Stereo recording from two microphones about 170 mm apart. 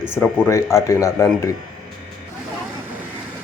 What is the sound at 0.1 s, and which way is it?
Speech, 15° left (ahead or behind).